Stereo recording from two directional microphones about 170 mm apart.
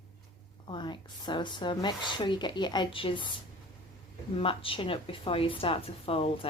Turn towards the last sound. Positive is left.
turn(degrees=35)  # may be behind; listen again after turning